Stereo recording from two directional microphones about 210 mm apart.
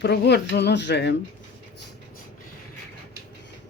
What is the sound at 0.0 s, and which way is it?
Speech, 50° left (ahead or behind).